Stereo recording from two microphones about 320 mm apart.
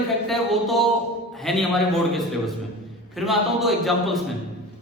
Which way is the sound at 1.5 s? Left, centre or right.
Centre.